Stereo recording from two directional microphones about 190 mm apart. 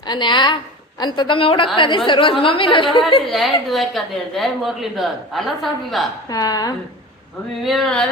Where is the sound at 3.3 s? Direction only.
Centre (ahead or behind).